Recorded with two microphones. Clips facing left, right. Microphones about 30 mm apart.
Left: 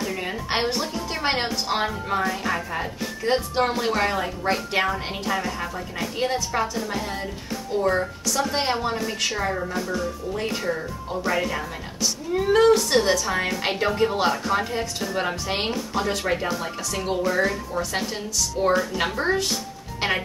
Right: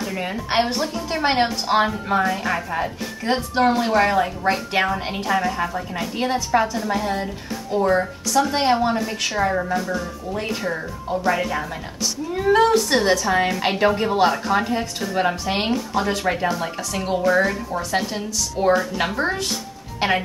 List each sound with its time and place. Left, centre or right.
0.1 s a woman's voice: centre
9.6 s a woman's voice: centre